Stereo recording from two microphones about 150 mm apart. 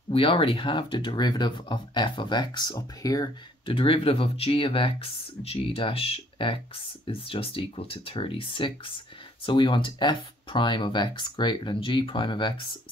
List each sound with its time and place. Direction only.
0.1 s speech: 35° left (ahead or behind)
3.7 s speech: 35° left (ahead or behind)